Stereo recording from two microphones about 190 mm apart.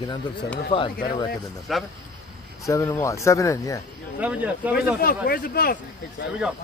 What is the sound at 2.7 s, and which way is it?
Speech, 15° left (ahead or behind).